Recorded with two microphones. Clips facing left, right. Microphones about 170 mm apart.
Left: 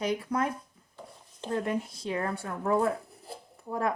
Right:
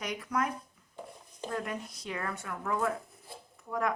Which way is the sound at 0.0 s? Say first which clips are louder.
Left 4 dB; 30° left (ahead or behind).